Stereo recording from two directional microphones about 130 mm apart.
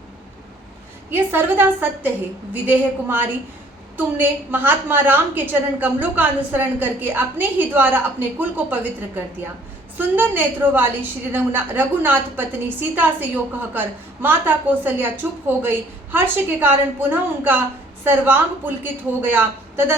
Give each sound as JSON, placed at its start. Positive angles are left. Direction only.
{"t": 1.1, "sound": "a woman's voice", "side_deg": -15}